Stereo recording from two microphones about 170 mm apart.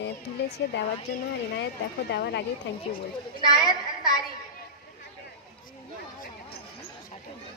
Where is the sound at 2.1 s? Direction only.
80° left.